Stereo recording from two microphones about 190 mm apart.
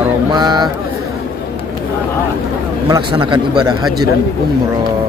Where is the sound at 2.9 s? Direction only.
25° right (ahead or behind).